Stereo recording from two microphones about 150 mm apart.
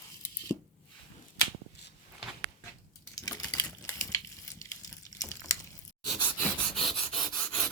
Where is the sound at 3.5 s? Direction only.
25° left (ahead or behind).